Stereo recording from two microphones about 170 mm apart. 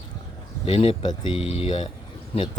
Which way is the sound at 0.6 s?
35° left (ahead or behind).